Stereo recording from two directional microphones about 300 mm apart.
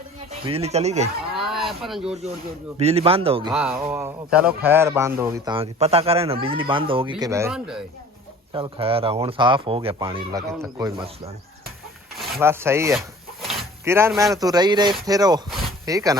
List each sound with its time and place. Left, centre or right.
0.4 s speech: centre
1.4 s a sound: centre
2.7 s speech: centre
3.5 s speech: centre
8.5 s speech: centre
12.1 s rub: centre
13.5 s a sound: centre
14.3 s speech: centre